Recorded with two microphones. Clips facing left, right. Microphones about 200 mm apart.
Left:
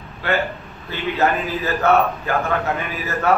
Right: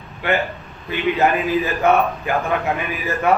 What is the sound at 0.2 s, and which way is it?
A man's voice, 15° right (ahead or behind).